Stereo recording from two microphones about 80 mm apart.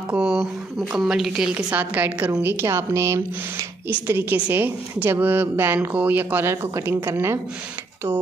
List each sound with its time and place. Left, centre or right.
0.1 s a sound: centre
0.9 s a woman's voice: centre; by 2.3 s right
2.4 s a woman's voice: right